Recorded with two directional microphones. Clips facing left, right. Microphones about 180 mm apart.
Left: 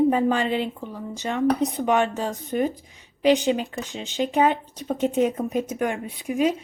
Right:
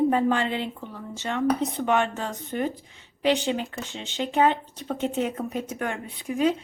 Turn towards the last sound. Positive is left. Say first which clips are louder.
# left 1 dB
turn(degrees=15)  # may be behind; listen again after turning